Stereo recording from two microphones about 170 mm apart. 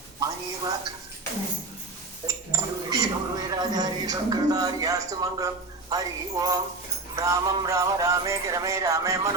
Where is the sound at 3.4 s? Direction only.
20° right (ahead or behind).